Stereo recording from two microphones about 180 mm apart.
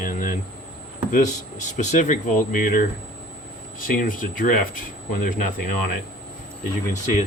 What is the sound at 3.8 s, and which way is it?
Speech, 50° left (ahead or behind).